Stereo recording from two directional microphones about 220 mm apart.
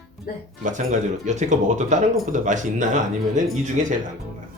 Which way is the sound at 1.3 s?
30° right (ahead or behind).